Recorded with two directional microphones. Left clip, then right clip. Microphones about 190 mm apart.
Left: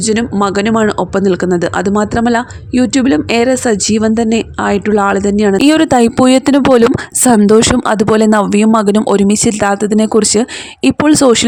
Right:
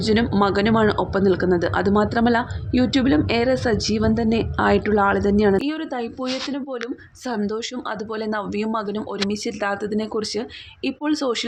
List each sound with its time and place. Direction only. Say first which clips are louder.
0.1 s speech: left 5 dB; 35° left (ahead or behind)
5.5 s speech: left 16 dB; 65° left (ahead or behind)